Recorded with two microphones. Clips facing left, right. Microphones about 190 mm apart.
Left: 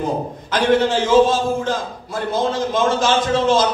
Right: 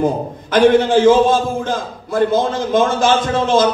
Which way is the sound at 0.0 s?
55° right (ahead or behind).